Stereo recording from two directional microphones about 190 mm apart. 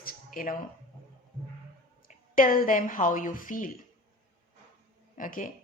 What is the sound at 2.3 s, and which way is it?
Speech, 45° left (ahead or behind).